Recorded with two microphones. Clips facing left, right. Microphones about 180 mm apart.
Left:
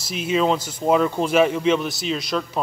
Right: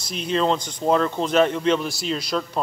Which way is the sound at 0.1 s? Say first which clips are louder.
Left 1 dB; 5° left (ahead or behind).